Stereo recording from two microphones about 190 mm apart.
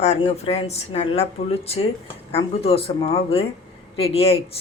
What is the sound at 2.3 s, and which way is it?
A woman's voice, 30° left (ahead or behind).